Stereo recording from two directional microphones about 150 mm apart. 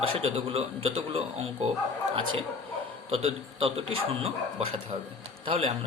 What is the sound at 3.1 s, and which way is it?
A man's voice, 40° right (ahead or behind).